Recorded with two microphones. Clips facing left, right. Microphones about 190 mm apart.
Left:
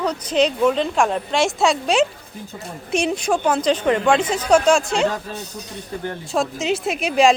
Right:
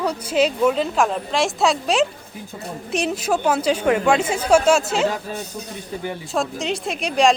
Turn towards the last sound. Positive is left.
turn(degrees=5)  # may be behind; listen again after turning